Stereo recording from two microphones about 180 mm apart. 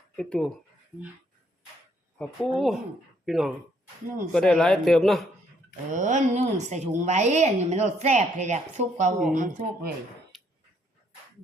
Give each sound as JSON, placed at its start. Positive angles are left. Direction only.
{"t": 0.2, "sound": "a man's voice", "side_deg": 5}
{"t": 2.1, "sound": "a man's voice", "side_deg": 5}
{"t": 5.9, "sound": "a woman's voice", "side_deg": -45}
{"t": 10.3, "sound": "dog", "side_deg": 0}